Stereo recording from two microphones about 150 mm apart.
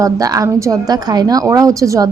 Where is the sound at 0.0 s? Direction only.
25° right (ahead or behind).